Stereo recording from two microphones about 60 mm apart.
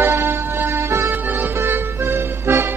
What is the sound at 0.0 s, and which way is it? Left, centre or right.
Music, right.